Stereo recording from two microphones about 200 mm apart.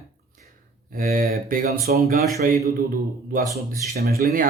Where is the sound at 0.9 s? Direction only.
45° right (ahead or behind).